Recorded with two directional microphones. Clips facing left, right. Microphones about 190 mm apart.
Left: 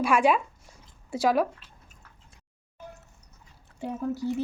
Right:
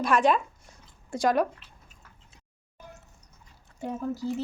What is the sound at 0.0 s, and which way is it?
Speech, 10° left (ahead or behind).